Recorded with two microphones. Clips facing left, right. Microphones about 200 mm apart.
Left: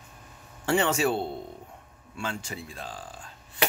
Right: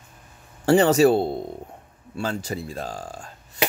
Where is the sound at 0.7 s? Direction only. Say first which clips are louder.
Right 9 dB; 40° right (ahead or behind).